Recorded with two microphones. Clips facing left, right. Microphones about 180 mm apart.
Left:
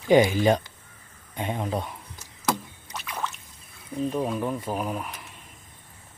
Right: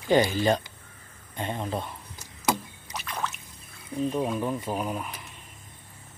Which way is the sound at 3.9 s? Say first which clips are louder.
Even; 5° left (ahead or behind).